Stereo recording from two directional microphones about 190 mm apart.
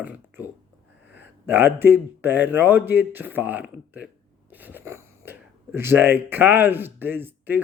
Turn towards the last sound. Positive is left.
turn(degrees=-10)  # may be behind; listen again after turning